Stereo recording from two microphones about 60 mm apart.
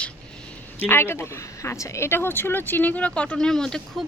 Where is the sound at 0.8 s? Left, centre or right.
Left; by 4.0 s centre.